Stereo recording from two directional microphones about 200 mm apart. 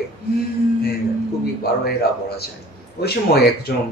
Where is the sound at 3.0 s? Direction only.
50° left (ahead or behind).